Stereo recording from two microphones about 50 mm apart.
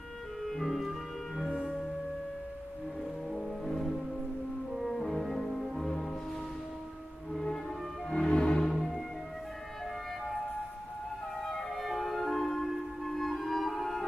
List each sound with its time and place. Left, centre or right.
0.5 s clarinet: centre
3.3 s music: centre
4.7 s cello: centre
8.1 s music: centre
8.6 s music: centre
11.4 s music: centre